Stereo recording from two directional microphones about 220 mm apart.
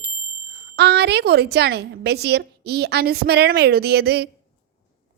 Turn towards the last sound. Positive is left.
turn(degrees=-45)  # may be behind; listen again after turning